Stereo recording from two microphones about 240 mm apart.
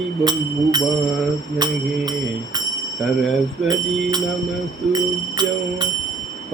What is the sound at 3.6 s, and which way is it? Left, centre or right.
Speech, centre.